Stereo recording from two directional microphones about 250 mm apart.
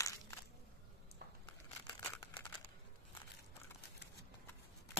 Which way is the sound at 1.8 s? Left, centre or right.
Centre.